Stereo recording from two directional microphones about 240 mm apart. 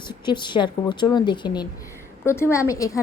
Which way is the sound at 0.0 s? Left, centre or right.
Centre.